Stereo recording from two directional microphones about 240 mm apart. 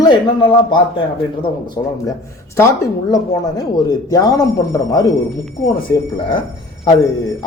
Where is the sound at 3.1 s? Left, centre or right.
Centre.